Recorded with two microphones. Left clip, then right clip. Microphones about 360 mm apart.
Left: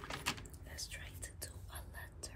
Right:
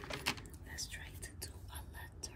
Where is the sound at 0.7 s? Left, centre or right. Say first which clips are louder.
Right 2 dB; centre.